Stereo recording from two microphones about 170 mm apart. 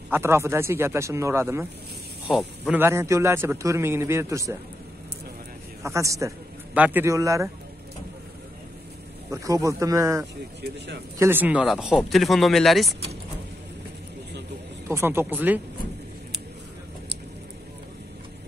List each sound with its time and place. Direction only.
0.1 s a man's voice: 15° right (ahead or behind)
2.2 s speech: 5° right (ahead or behind)
2.8 s a man's voice: 15° right (ahead or behind)
5.8 s a man's voice: 20° right (ahead or behind)
9.3 s a man's voice: 20° right (ahead or behind); by 12.9 s centre (ahead or behind)
14.9 s a man's voice: 15° right (ahead or behind)